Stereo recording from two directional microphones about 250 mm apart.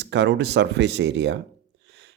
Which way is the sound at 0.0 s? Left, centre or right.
Right.